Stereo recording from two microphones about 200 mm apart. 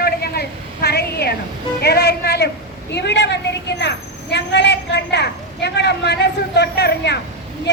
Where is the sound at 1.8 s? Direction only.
50° left (ahead or behind).